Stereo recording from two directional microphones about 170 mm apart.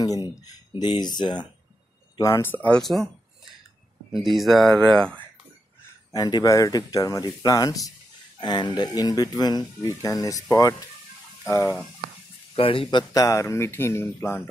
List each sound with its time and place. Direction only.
0.7 s speech: 25° left (ahead or behind); by 5.2 s 5° left (ahead or behind)
6.1 s speech: 20° left (ahead or behind)
12.5 s speech: 30° left (ahead or behind)
13.1 s speech: 20° left (ahead or behind)